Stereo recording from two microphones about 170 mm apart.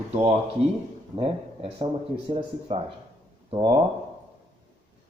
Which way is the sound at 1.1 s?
35° right (ahead or behind).